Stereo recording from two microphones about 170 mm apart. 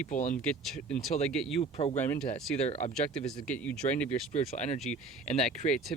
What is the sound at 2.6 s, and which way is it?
Speech, 40° left (ahead or behind).